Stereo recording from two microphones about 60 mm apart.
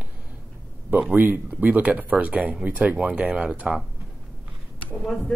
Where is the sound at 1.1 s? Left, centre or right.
Right; by 3.8 s centre.